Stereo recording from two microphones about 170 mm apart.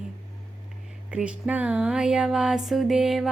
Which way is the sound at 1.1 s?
5° right (ahead or behind).